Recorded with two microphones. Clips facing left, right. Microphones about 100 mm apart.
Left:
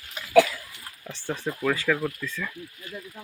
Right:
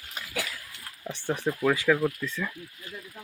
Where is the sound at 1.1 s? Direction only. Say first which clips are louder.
Right 2 dB; 15° right (ahead or behind).